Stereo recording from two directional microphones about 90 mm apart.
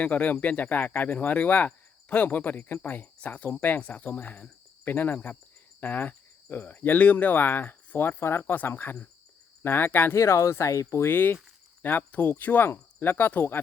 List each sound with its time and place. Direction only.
0.0 s speech: 15° left (ahead or behind); by 11.1 s 35° left (ahead or behind)
11.1 s speech: 20° left (ahead or behind)